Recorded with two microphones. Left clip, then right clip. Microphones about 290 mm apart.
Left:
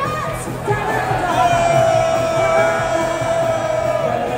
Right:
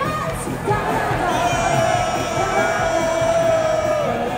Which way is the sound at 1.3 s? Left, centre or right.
Centre.